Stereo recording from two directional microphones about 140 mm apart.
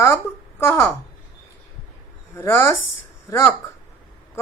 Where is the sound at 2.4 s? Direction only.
15° left (ahead or behind).